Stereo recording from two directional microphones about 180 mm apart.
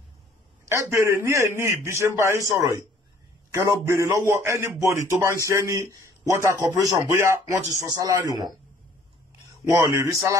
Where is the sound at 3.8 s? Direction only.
15° right (ahead or behind).